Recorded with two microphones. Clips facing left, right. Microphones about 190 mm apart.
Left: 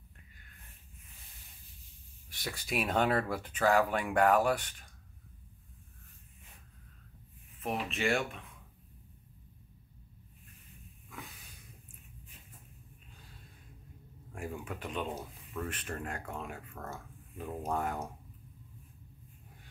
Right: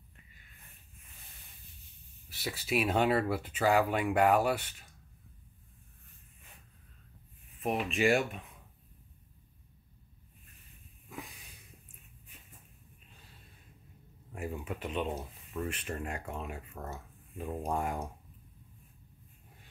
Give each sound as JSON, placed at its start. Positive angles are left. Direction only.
{"t": 2.2, "sound": "speech", "side_deg": -5}
{"t": 7.9, "sound": "speech", "side_deg": -15}
{"t": 14.3, "sound": "speech", "side_deg": -5}